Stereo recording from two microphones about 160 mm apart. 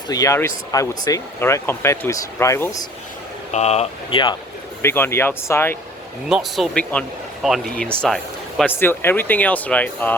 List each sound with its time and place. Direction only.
0.1 s speech: 20° left (ahead or behind)
3.5 s speech: 40° left (ahead or behind)
4.8 s speech: 15° left (ahead or behind)
6.2 s speech: 5° right (ahead or behind)
8.7 s speech: 15° left (ahead or behind)